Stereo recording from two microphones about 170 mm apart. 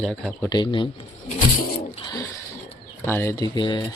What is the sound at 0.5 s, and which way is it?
Speech, 30° left (ahead or behind).